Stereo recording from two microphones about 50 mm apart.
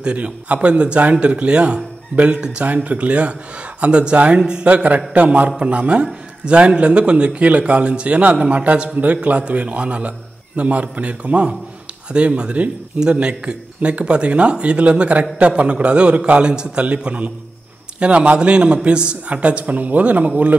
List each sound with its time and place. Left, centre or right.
0.0 s a man's voice: right